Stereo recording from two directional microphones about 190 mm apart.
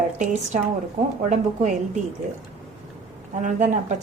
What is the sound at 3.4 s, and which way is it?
Speech, 40° right (ahead or behind).